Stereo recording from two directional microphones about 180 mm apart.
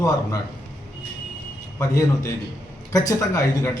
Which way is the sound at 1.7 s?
20° left (ahead or behind).